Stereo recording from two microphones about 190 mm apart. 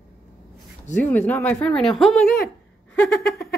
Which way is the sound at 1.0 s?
10° left (ahead or behind).